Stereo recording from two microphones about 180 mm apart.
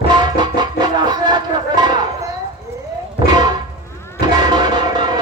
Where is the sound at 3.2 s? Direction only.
25° right (ahead or behind).